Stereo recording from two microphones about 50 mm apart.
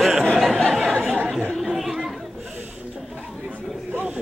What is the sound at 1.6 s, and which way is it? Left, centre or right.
Chatter, centre.